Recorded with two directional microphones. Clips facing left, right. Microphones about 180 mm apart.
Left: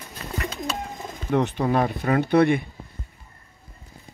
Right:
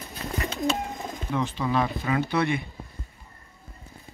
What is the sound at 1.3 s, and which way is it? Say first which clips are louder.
Speech: left 5 dB; 60° left (ahead or behind).